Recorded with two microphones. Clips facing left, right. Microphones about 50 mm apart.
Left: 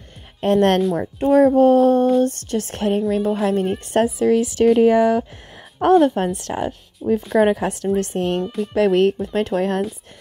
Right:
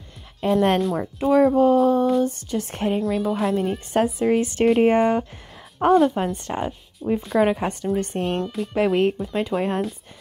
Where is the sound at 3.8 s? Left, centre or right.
Left.